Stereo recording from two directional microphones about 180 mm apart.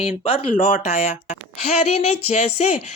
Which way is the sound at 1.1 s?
40° left (ahead or behind).